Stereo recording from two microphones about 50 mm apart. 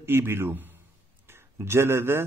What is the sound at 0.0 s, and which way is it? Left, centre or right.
Speech, right.